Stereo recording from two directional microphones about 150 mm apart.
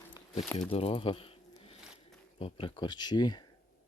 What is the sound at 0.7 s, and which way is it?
Speech, 40° left (ahead or behind).